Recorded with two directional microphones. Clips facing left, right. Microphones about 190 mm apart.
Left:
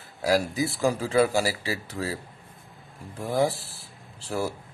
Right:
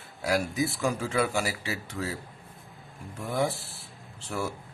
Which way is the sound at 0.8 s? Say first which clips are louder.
Left 8 dB; 35° left (ahead or behind).